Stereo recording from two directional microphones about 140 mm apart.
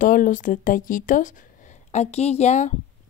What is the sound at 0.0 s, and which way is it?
Speech, 75° left (ahead or behind).